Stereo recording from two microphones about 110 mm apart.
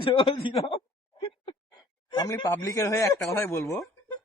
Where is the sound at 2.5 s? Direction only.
30° left (ahead or behind).